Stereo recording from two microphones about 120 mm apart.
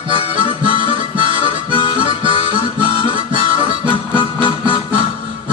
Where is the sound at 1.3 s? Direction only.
45° left (ahead or behind).